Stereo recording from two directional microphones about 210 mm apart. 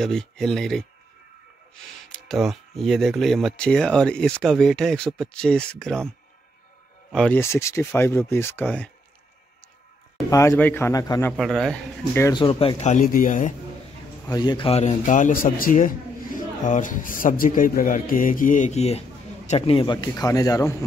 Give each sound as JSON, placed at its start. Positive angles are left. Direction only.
{"t": 0.0, "sound": "speech", "side_deg": 0}
{"t": 2.0, "sound": "speech", "side_deg": 0}
{"t": 7.1, "sound": "speech", "side_deg": 5}
{"t": 10.3, "sound": "speech", "side_deg": 15}
{"t": 11.3, "sound": "speech", "side_deg": 0}
{"t": 12.4, "sound": "speech", "side_deg": 25}
{"t": 14.3, "sound": "speech", "side_deg": 20}